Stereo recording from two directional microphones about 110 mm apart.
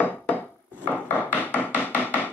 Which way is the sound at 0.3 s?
15° left (ahead or behind).